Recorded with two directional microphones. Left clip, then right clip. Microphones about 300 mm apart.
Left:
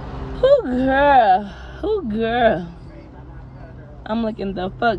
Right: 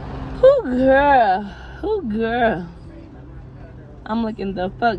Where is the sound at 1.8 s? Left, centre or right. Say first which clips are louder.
Left 1 dB; centre.